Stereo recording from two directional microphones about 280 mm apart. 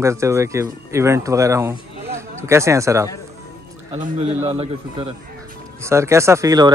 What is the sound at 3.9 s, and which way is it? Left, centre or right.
A man's voice, right.